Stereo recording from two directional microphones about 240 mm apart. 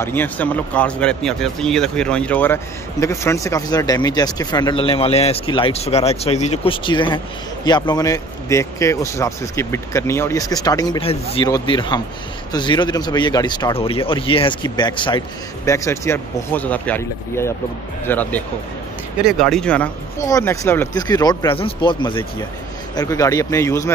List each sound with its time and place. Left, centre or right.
0.0 s speech: centre